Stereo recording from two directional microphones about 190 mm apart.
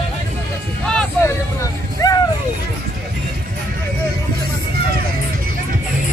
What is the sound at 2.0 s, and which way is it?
Vehicle, 20° left (ahead or behind).